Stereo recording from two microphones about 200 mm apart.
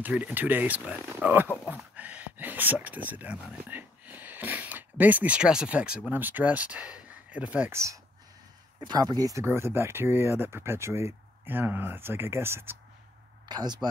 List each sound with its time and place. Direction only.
0.0 s speech: 5° right (ahead or behind)